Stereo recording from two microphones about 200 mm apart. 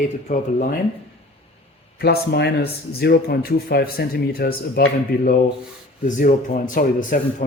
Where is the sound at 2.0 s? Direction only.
55° left (ahead or behind).